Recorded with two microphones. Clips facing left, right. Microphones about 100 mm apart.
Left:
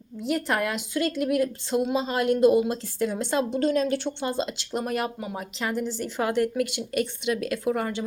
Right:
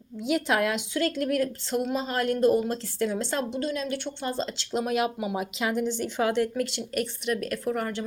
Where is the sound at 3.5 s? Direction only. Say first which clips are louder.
Left 6 dB; 45° left (ahead or behind).